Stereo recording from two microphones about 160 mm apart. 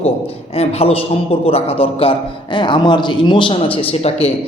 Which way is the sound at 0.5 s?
40° left (ahead or behind).